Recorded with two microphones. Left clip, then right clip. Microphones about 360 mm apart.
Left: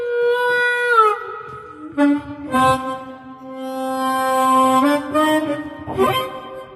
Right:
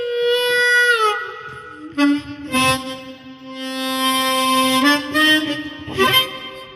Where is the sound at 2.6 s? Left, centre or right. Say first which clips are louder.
Left 2 dB; centre.